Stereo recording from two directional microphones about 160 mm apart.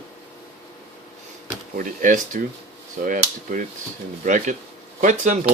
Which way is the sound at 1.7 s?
55° right (ahead or behind).